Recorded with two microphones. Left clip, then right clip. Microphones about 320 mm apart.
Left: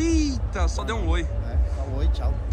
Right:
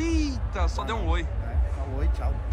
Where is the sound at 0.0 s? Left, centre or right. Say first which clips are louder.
Left 4 dB; centre.